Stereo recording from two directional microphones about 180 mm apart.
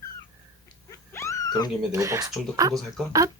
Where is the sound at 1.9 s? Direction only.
15° right (ahead or behind).